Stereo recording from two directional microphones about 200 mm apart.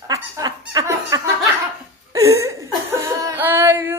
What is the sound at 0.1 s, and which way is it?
Laughter, 20° right (ahead or behind).